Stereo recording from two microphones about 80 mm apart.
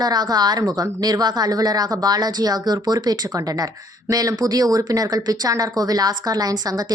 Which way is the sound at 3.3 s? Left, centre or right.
Right.